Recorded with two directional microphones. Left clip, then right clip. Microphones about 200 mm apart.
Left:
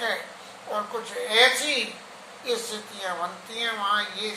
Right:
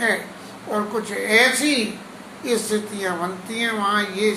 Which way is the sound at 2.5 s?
15° right (ahead or behind).